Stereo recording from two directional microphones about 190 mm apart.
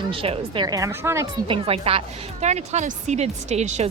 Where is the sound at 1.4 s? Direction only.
30° right (ahead or behind).